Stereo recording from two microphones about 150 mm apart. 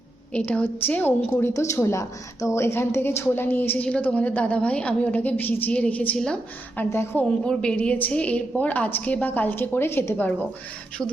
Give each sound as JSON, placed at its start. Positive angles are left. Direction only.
{"t": 0.3, "sound": "a woman's voice", "side_deg": 10}
{"t": 7.4, "sound": "a woman's voice", "side_deg": 5}